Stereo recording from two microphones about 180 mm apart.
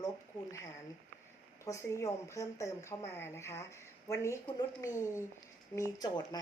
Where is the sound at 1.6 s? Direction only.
15° left (ahead or behind).